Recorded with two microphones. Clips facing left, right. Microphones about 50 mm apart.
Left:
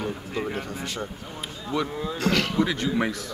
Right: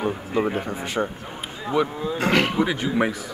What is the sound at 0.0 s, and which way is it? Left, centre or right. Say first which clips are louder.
Speech: right 6 dB; right.